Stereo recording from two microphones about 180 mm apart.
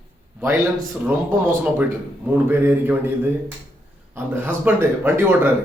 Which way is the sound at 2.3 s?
10° right (ahead or behind).